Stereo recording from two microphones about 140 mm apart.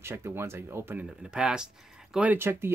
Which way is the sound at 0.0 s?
15° right (ahead or behind).